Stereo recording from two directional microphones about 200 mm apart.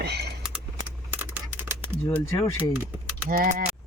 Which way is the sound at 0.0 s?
55° right (ahead or behind).